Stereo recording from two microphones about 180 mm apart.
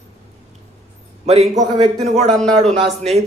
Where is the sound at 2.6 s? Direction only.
35° right (ahead or behind).